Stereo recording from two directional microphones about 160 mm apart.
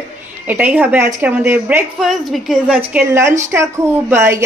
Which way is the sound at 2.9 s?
10° right (ahead or behind).